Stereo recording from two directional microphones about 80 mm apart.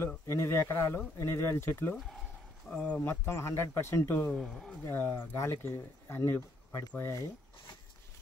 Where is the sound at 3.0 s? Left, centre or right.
Left.